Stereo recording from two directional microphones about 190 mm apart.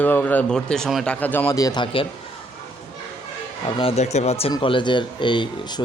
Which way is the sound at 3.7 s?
30° left (ahead or behind).